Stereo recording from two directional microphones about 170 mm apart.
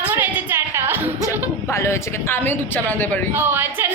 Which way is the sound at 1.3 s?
15° left (ahead or behind).